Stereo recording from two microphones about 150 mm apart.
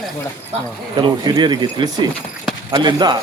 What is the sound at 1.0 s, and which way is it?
Speech, 30° right (ahead or behind).